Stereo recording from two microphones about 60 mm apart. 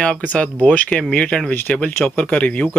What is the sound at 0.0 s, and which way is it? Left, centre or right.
Speech, left.